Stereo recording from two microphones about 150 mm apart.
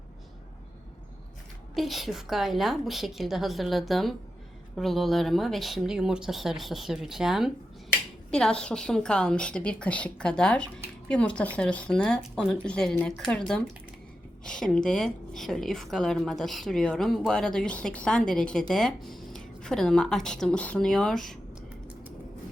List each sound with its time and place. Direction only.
1.7 s a woman's voice: centre (ahead or behind)